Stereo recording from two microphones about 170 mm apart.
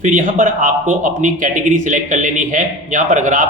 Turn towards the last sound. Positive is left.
turn(degrees=-45)  # may be behind; listen again after turning